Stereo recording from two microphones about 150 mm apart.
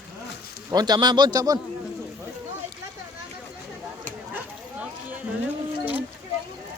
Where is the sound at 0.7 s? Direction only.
30° right (ahead or behind).